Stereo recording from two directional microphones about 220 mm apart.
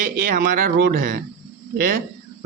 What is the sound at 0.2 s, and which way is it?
Speech, 40° right (ahead or behind).